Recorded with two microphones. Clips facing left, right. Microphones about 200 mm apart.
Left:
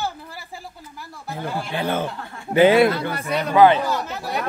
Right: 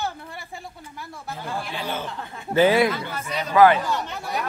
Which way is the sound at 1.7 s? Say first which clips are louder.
Left 10 dB; 55° left (ahead or behind).